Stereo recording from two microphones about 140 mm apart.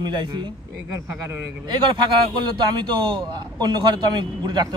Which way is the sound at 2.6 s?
35° right (ahead or behind).